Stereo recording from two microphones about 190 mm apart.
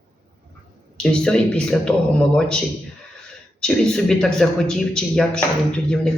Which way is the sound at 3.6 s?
5° left (ahead or behind).